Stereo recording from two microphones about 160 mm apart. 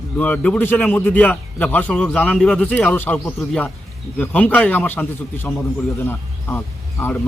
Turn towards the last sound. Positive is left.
turn(degrees=10)  # may be behind; listen again after turning